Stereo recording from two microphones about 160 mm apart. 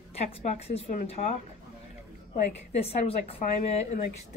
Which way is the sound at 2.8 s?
40° left (ahead or behind).